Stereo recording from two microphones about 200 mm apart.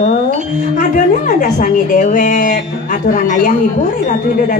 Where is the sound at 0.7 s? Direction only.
40° left (ahead or behind).